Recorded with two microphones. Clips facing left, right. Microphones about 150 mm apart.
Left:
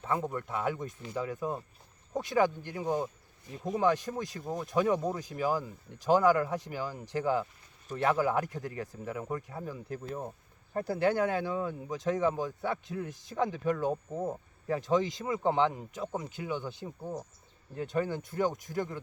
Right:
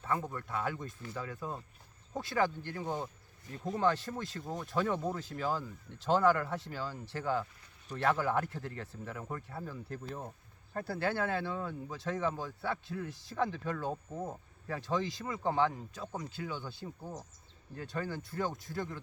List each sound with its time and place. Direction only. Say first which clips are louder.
0.0 s speech: left 3 dB; 20° left (ahead or behind)